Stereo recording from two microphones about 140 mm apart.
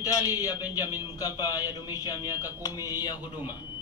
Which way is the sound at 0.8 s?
15° right (ahead or behind).